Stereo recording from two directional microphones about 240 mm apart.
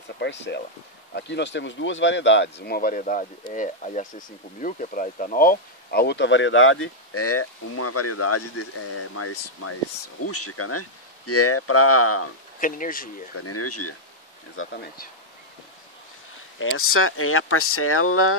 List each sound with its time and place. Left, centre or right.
0.2 s speech: left
12.5 s speech: left
13.4 s speech: left
14.6 s speech: left
16.5 s speech: left